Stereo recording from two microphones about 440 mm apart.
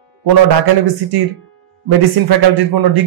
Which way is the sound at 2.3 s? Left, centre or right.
Right.